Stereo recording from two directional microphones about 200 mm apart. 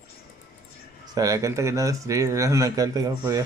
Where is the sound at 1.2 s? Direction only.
15° right (ahead or behind).